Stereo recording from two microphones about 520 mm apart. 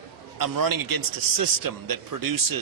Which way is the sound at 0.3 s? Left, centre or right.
Right.